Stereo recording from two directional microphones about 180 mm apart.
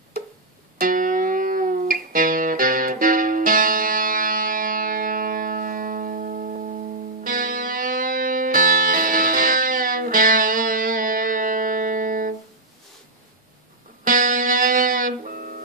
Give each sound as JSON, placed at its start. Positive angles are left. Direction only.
{"t": 0.7, "sound": "music", "side_deg": -50}
{"t": 14.0, "sound": "music", "side_deg": -50}